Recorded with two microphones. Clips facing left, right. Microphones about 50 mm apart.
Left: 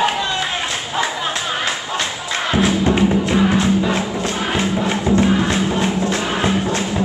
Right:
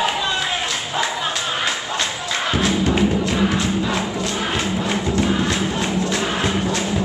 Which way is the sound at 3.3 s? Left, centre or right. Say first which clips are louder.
Left 4 dB; left.